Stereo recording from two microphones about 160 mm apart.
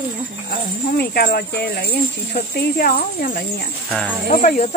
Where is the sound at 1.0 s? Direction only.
80° left.